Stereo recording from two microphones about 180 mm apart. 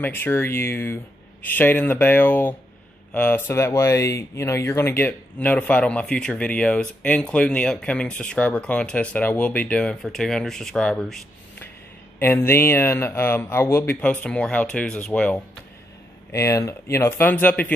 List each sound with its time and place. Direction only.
0.0 s speech: 10° left (ahead or behind)
12.2 s speech: 10° left (ahead or behind)